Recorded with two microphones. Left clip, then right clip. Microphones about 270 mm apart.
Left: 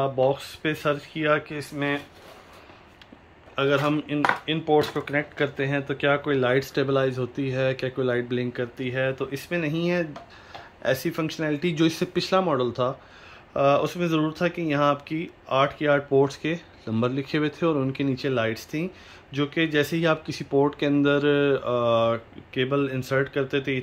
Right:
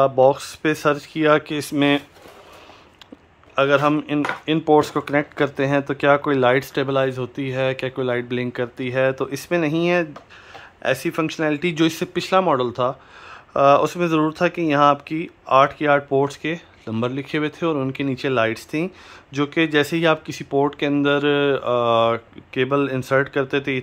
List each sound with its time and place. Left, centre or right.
0.3 s speech: centre
3.5 s speech: centre